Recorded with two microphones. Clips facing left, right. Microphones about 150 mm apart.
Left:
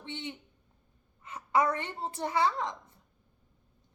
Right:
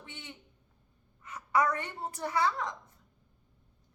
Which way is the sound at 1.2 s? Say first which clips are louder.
Left 1 dB; 25° left (ahead or behind).